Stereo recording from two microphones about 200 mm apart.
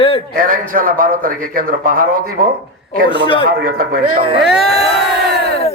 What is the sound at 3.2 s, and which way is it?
Speech, 25° left (ahead or behind).